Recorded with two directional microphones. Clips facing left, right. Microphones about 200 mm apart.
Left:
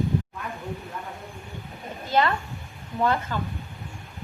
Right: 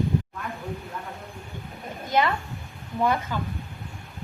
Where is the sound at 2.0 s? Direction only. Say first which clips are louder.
Left 1 dB; 15° right (ahead or behind).